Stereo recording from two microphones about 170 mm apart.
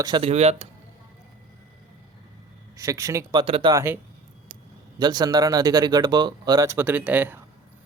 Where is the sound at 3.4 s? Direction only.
35° right (ahead or behind).